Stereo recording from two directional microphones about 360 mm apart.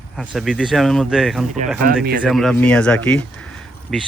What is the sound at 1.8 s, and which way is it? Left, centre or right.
Speech, right.